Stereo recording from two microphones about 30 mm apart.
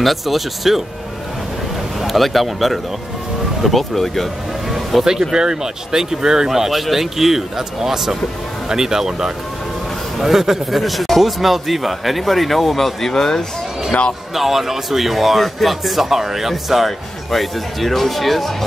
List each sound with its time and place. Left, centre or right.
0.0 s a man's voice: centre
2.0 s a man's voice: centre
4.6 s a sound: centre
5.3 s speech: right
6.7 s a man's voice: centre
13.1 s speech: centre
13.9 s speech: left
14.3 s a man's voice: centre